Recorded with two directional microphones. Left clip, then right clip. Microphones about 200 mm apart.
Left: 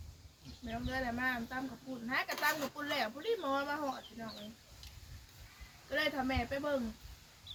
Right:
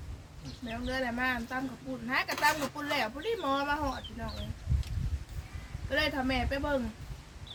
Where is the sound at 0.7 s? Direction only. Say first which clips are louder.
Right 4 dB; 20° right (ahead or behind).